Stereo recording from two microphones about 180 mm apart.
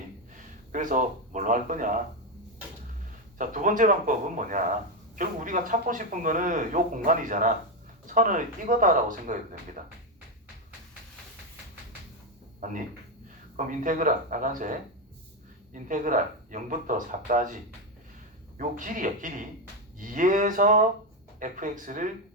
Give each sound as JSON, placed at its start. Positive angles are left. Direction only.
{"t": 0.7, "sound": "speech", "side_deg": -45}
{"t": 3.3, "sound": "speech", "side_deg": -45}
{"t": 12.5, "sound": "a sound", "side_deg": -45}
{"t": 13.7, "sound": "speech", "side_deg": -45}